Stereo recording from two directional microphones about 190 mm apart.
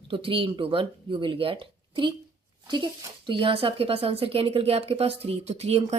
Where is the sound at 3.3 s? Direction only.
30° right (ahead or behind).